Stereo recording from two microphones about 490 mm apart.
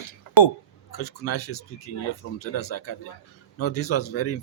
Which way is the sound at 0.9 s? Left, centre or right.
Left.